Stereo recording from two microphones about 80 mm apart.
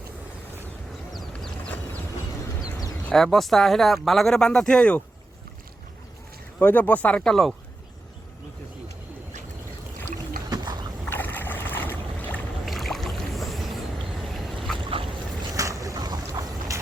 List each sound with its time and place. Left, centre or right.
1.6 s vehicle: centre
3.1 s speech: centre
6.6 s speech: centre
10.5 s a sound: right
11.1 s boat: left
12.6 s boat: centre
14.8 s duck: right
15.5 s boat: right